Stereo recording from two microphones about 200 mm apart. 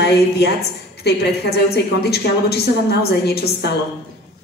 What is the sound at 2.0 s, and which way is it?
A woman's voice, 55° left (ahead or behind).